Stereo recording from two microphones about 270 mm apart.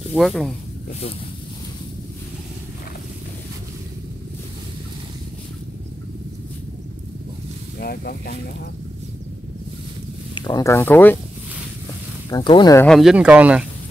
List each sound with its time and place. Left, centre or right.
0.1 s speech: centre
7.8 s speech: left
10.3 s speech: centre
12.3 s speech: centre
12.8 s speech: centre